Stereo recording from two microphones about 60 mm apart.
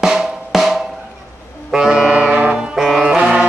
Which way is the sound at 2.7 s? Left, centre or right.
Centre.